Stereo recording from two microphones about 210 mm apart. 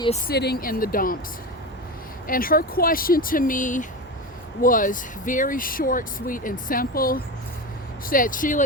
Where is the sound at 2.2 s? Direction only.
40° left (ahead or behind).